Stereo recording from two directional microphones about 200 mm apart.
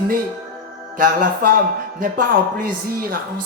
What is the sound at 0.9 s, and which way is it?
Speech, 45° right (ahead or behind).